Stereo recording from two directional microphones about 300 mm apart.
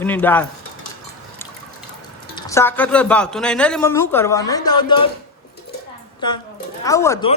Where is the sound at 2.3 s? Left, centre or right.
Centre.